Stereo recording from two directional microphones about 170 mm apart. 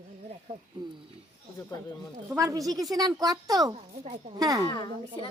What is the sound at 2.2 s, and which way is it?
A woman's voice, 20° right (ahead or behind).